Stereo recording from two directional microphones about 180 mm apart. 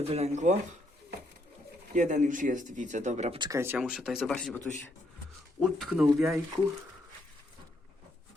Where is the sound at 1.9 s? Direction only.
45° right (ahead or behind).